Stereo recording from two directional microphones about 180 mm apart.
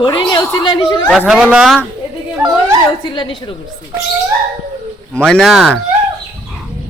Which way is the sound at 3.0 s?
25° left (ahead or behind).